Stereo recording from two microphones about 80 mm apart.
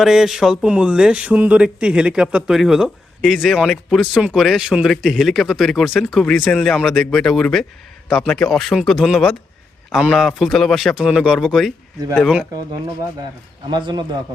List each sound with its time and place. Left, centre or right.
0.0 s speech: centre
10.9 s speech: centre
13.7 s a man's voice: right